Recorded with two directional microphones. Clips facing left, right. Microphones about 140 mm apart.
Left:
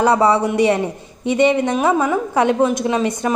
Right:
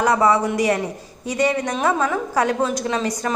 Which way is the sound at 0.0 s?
30° left (ahead or behind).